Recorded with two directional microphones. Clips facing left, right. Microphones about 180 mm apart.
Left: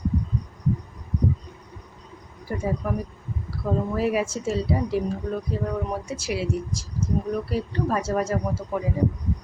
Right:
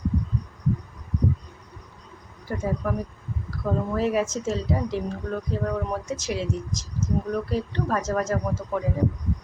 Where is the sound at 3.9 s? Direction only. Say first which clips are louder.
Right 2 dB; 10° left (ahead or behind).